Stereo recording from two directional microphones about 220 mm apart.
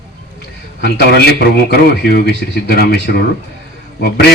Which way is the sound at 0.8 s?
45° left (ahead or behind).